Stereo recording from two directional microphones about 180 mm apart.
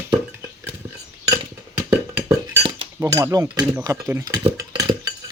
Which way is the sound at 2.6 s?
30° right (ahead or behind).